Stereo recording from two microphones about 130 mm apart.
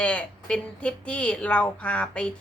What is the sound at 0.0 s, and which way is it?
A woman's voice, 10° left (ahead or behind).